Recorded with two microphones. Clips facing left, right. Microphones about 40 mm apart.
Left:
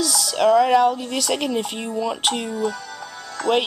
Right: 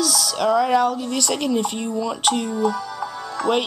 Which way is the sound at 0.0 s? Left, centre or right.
Centre.